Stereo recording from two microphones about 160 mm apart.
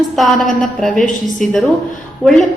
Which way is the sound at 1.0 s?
55° left (ahead or behind).